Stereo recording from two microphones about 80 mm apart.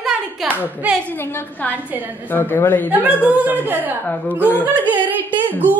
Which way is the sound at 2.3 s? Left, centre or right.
Left.